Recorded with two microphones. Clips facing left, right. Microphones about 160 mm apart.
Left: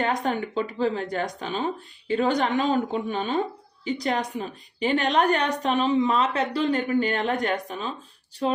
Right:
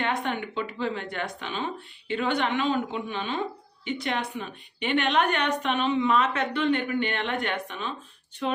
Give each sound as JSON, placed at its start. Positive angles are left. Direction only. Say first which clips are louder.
{"t": 0.0, "sound": "a woman's voice", "louder": "left 3 dB", "side_deg": 40}